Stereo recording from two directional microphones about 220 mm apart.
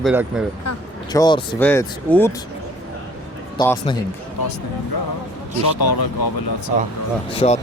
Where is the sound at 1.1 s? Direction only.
20° left (ahead or behind).